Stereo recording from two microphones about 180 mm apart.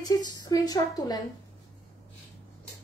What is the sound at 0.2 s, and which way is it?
Speech, 20° left (ahead or behind).